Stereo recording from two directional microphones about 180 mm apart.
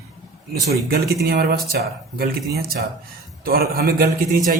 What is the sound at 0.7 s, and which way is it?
A man's voice, 60° right (ahead or behind).